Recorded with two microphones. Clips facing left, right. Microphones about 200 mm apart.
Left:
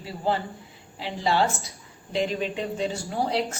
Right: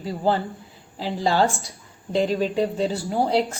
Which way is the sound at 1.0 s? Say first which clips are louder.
Right 3 dB; 35° right (ahead or behind).